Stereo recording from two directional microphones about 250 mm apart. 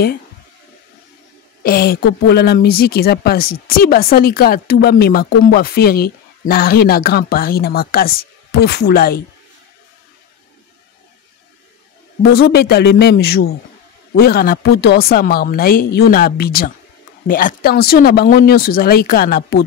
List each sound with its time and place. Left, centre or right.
1.6 s speech: left
12.2 s speech: left